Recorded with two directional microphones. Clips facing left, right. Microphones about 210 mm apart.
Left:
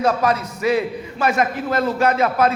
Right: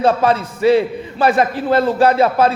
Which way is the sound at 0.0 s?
30° right (ahead or behind).